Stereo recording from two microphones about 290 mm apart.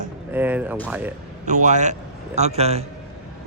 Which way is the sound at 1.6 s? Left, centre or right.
Right.